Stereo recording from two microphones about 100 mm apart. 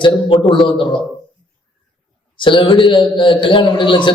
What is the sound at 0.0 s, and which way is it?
Speech, 55° left (ahead or behind).